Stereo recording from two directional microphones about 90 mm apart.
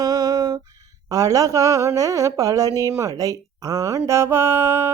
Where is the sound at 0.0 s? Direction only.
45° right (ahead or behind).